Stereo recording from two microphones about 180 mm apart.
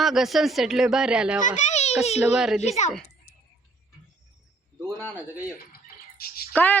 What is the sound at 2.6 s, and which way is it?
Speech, 40° left (ahead or behind).